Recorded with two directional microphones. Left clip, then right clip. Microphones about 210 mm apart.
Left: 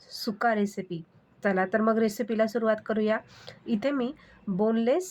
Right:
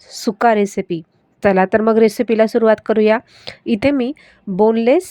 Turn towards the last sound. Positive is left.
turn(degrees=-35)  # may be behind; listen again after turning